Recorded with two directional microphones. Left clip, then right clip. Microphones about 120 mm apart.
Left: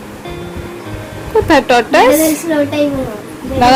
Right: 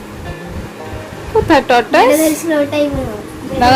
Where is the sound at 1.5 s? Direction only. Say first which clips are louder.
Left 1 dB; 10° left (ahead or behind).